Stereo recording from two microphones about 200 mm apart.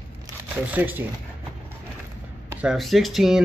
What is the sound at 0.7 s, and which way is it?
Speech, 10° right (ahead or behind).